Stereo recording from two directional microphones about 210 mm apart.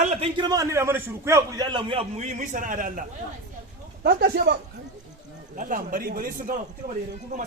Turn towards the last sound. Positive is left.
turn(degrees=-35)  # may be behind; listen again after turning